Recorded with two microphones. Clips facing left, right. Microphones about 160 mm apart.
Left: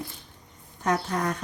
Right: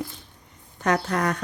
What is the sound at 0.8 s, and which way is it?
Speech, 75° right (ahead or behind).